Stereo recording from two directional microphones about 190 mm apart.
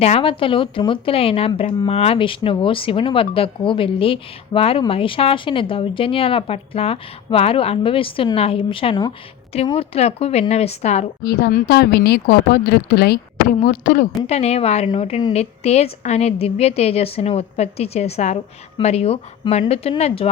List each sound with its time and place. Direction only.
0.0 s a woman's voice: 30° left (ahead or behind)
11.2 s speech: 55° left (ahead or behind)
13.6 s a woman's voice: 40° left (ahead or behind)